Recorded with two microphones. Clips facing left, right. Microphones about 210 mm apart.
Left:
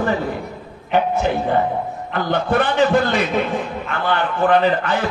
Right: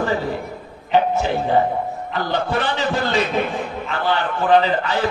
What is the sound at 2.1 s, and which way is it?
A man's voice, 55° left (ahead or behind).